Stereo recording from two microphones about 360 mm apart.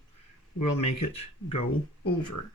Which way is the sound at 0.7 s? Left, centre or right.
Left.